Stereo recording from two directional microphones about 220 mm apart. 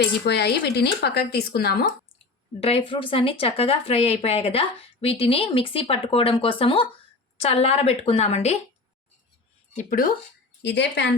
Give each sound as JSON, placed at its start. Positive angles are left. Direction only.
{"t": 0.0, "sound": "speech", "side_deg": 50}
{"t": 2.6, "sound": "speech", "side_deg": 25}
{"t": 9.7, "sound": "speech", "side_deg": 40}
{"t": 10.6, "sound": "speech", "side_deg": 50}